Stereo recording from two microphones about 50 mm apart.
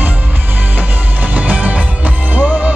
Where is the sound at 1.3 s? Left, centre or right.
Right.